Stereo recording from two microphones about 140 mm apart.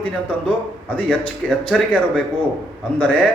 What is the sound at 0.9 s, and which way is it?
A man's voice, 10° left (ahead or behind).